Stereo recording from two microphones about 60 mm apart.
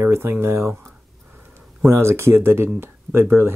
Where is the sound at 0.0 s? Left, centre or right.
Right.